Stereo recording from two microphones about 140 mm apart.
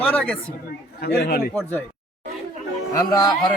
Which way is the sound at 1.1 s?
90° left.